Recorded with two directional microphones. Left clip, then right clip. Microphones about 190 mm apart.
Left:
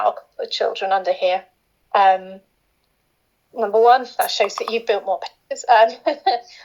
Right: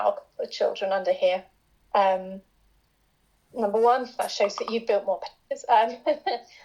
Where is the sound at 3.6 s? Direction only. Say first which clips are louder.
Left 7 dB; 35° left (ahead or behind).